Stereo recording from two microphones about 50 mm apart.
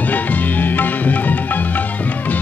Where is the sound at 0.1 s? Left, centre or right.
Left.